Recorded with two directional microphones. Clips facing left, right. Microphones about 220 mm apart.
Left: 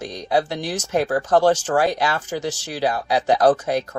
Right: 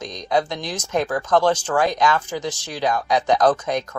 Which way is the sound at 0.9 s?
40° left (ahead or behind).